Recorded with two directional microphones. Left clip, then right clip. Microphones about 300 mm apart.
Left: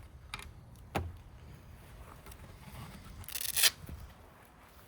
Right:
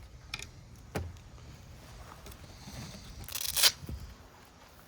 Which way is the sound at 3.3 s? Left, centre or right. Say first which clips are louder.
Right 3 dB; centre.